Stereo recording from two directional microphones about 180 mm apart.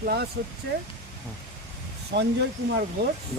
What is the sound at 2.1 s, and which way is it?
Speech, 70° right (ahead or behind).